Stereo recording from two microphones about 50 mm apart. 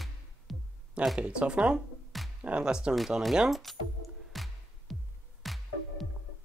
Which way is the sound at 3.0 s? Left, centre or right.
Centre.